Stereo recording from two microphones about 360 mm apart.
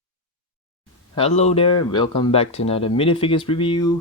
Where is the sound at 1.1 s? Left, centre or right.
Centre.